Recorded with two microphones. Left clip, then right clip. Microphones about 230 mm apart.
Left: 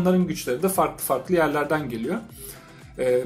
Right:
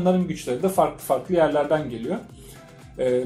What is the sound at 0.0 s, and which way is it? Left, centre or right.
Speech, left.